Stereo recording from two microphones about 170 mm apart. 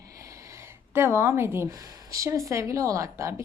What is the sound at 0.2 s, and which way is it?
Speech, 20° right (ahead or behind).